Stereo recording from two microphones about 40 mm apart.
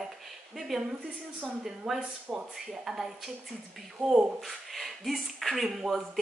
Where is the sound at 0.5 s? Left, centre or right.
Centre.